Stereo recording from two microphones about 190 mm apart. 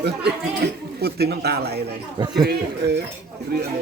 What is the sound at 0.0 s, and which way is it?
Speech, 60° right (ahead or behind).